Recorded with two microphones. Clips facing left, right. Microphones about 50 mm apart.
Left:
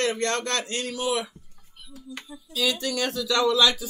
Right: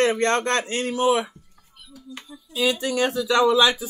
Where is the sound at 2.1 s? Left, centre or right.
Centre.